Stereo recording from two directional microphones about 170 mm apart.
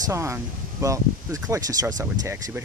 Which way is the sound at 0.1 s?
15° right (ahead or behind).